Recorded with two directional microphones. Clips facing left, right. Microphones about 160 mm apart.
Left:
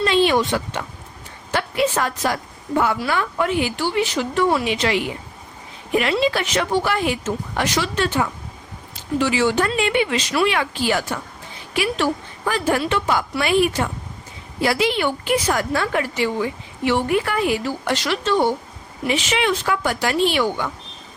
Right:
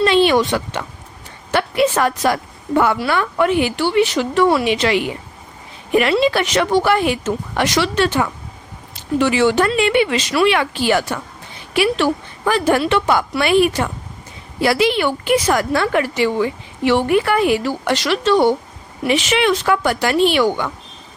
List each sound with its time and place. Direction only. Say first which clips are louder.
0.0 s a sound: right 4 dB; 70° right (ahead or behind)
1.5 s a woman's voice: right 4 dB; 65° right (ahead or behind)
9.2 s a woman's voice: right 4 dB; 65° right (ahead or behind)